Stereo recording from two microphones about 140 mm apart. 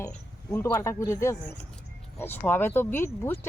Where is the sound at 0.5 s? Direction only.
20° left (ahead or behind).